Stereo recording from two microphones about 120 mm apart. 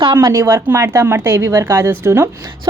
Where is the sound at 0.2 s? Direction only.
25° right (ahead or behind).